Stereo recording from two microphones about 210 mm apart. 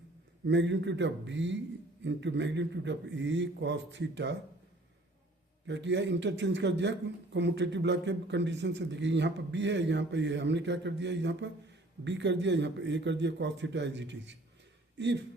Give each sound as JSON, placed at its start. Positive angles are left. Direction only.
{"t": 0.4, "sound": "a man's voice", "side_deg": -60}
{"t": 5.6, "sound": "a man's voice", "side_deg": -55}